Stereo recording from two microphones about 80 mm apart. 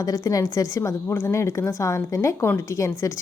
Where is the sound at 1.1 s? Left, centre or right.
Left.